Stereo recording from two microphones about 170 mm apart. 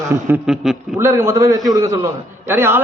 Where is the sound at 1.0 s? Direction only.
15° right (ahead or behind).